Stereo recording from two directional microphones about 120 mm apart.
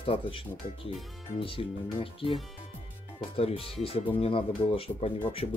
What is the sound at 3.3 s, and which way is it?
Speech, 55° left (ahead or behind).